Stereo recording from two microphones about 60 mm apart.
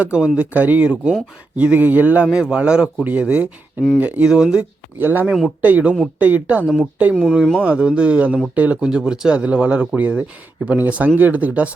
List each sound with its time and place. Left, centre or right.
0.0 s speech: centre
2.2 s speech: centre
3.0 s speech: right
3.2 s speech: centre
4.0 s speech: right
4.3 s speech: centre
4.9 s speech: right
5.6 s speech: right